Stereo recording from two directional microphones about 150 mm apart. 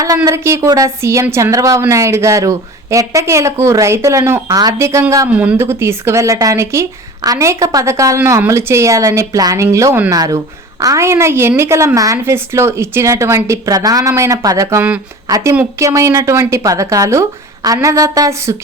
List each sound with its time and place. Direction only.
0.3 s a woman's voice: 20° right (ahead or behind)